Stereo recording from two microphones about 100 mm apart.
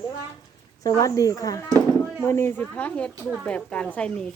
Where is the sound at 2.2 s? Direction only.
25° left (ahead or behind).